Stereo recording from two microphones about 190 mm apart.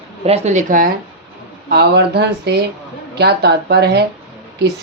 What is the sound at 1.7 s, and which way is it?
Speech, 60° right (ahead or behind).